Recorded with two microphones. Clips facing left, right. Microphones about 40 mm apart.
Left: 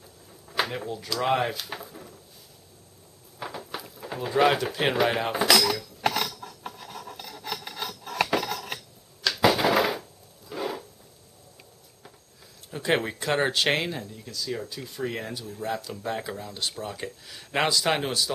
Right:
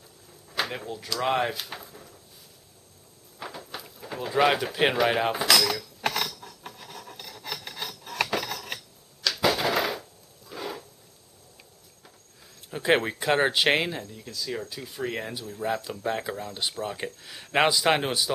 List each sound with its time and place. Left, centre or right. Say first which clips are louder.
0.7 s speech: left 2 dB; centre
3.3 s a sound: left 2 dB; centre
12.7 s speech: right 2 dB; centre